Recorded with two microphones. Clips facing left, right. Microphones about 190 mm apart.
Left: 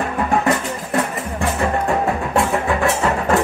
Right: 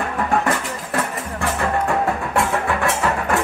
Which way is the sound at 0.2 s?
20° left (ahead or behind).